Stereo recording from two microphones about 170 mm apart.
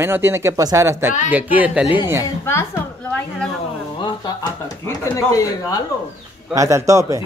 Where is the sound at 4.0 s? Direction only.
25° left (ahead or behind).